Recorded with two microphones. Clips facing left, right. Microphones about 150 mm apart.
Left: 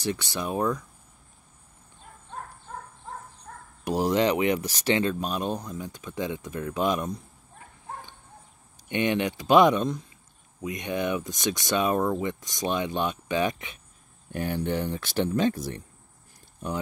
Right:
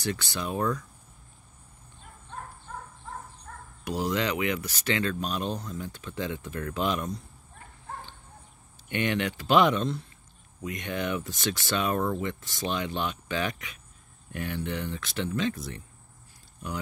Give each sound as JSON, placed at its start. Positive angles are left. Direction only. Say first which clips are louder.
{"t": 0.1, "sound": "speech", "louder": "left 3 dB", "side_deg": 15}
{"t": 3.8, "sound": "speech", "louder": "left 5 dB", "side_deg": 40}
{"t": 5.0, "sound": "speech", "louder": "left 2 dB", "side_deg": 20}
{"t": 8.8, "sound": "speech", "louder": "left 3 dB", "side_deg": 20}
{"t": 14.3, "sound": "speech", "louder": "left 5 dB", "side_deg": 35}